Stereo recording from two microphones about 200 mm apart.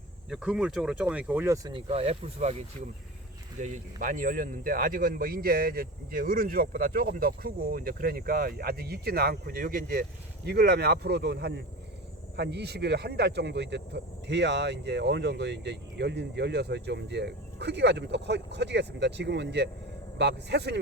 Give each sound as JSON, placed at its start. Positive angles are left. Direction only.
{"t": 0.3, "sound": "speech", "side_deg": -5}
{"t": 1.7, "sound": "speech", "side_deg": -30}